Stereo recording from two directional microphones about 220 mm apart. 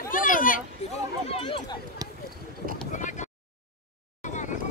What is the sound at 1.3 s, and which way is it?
Chatter, 20° left (ahead or behind).